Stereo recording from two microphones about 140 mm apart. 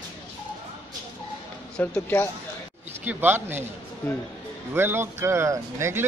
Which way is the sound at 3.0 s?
15° right (ahead or behind).